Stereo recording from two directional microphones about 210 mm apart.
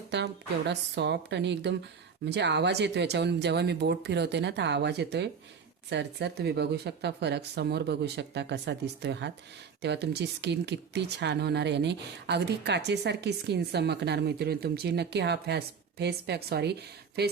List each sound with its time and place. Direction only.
0.1 s speech: 55° right (ahead or behind)